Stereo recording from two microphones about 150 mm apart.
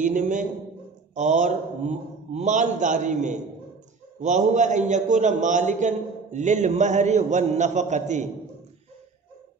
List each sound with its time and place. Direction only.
0.0 s a man's voice: 60° right (ahead or behind)